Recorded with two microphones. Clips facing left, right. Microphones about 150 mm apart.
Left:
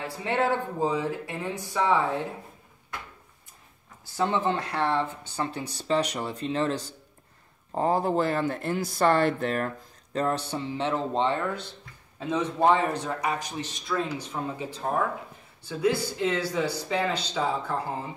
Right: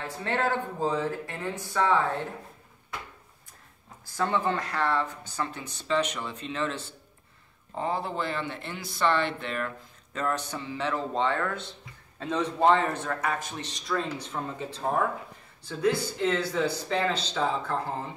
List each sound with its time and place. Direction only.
0.0 s speech: 10° left (ahead or behind)
4.2 s speech: 25° left (ahead or behind); by 9.7 s 40° left (ahead or behind)
10.1 s speech: 30° left (ahead or behind); by 13.5 s 15° left (ahead or behind)
13.7 s speech: 5° left (ahead or behind)